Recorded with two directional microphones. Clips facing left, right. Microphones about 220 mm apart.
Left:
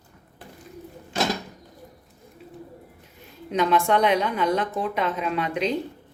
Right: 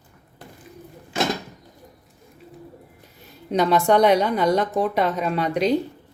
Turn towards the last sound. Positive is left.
turn(degrees=-40)  # may be behind; listen again after turning